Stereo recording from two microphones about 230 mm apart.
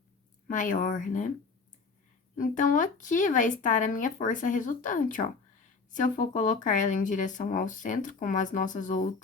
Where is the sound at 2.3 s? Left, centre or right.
Left.